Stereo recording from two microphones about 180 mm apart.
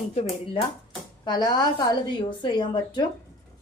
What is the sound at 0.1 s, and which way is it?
Speech, 35° left (ahead or behind).